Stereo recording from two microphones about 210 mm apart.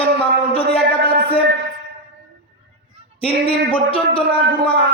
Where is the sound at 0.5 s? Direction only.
25° left (ahead or behind).